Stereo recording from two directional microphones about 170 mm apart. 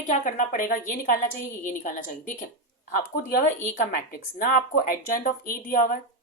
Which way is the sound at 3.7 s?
55° left (ahead or behind).